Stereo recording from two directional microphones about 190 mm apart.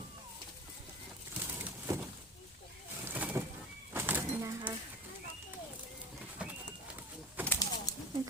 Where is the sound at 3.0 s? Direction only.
10° right (ahead or behind).